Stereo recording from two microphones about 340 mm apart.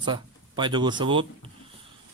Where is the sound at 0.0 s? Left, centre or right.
Centre.